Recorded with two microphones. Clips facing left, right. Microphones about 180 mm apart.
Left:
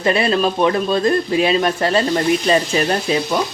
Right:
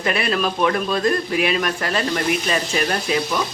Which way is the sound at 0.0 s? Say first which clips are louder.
Left 5 dB; 30° left (ahead or behind).